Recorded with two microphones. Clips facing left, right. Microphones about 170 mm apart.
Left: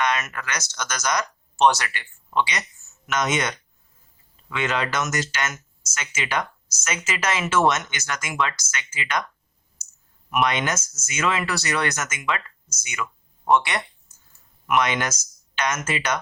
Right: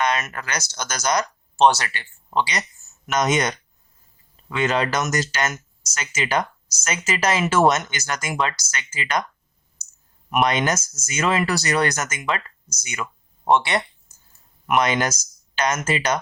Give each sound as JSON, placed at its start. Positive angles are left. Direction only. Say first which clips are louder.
{"t": 0.0, "sound": "speech", "louder": "right 1 dB", "side_deg": -30}
{"t": 10.2, "sound": "speech", "louder": "right 3 dB", "side_deg": -40}